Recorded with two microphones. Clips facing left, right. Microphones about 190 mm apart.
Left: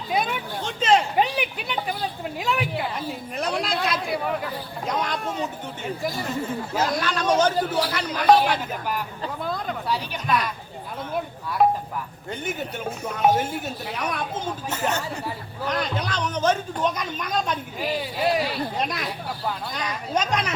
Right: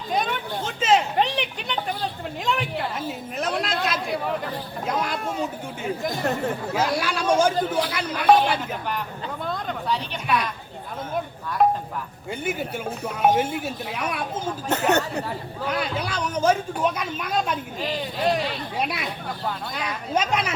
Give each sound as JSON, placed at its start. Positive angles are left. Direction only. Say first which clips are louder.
{"t": 0.1, "sound": "a sound", "louder": "even", "side_deg": 5}
{"t": 4.9, "sound": "speech", "louder": "even", "side_deg": -5}
{"t": 6.2, "sound": "speech", "louder": "right 3 dB", "side_deg": -65}
{"t": 6.7, "sound": "speech", "louder": "left 2 dB", "side_deg": -10}
{"t": 7.5, "sound": "speech", "louder": "even", "side_deg": 10}
{"t": 7.9, "sound": "speech", "louder": "left 1 dB", "side_deg": -10}
{"t": 9.4, "sound": "a sound", "louder": "even", "side_deg": 5}
{"t": 11.6, "sound": "speech", "louder": "even", "side_deg": 0}
{"t": 14.7, "sound": "speech", "louder": "right 7 dB", "side_deg": -65}
{"t": 15.6, "sound": "speech", "louder": "left 1 dB", "side_deg": -10}
{"t": 17.7, "sound": "speech", "louder": "left 1 dB", "side_deg": 10}
{"t": 18.8, "sound": "speech", "louder": "even", "side_deg": -10}